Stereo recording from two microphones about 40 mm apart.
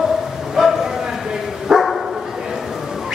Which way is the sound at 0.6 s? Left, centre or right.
Centre.